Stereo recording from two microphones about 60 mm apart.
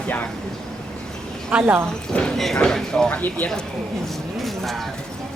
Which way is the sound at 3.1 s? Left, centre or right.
Left.